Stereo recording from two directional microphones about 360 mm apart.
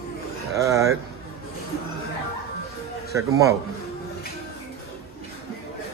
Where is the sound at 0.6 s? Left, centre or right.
Centre.